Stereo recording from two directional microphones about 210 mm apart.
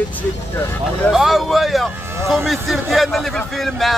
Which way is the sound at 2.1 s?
10° right (ahead or behind).